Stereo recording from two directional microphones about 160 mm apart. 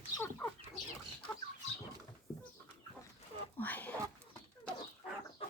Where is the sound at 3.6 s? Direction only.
10° left (ahead or behind).